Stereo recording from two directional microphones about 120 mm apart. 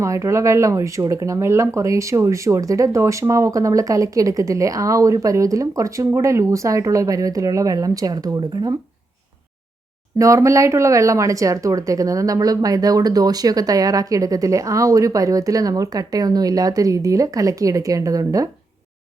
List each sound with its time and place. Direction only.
0.0 s speech: 25° right (ahead or behind)
10.2 s speech: 25° right (ahead or behind)